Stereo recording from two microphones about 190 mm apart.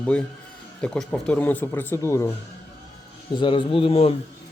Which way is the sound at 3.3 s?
25° left (ahead or behind).